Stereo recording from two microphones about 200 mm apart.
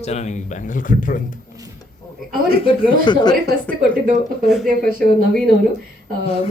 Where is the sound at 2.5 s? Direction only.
25° left (ahead or behind).